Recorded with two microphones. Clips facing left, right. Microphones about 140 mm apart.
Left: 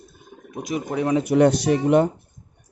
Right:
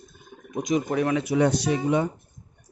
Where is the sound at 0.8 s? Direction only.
20° left (ahead or behind).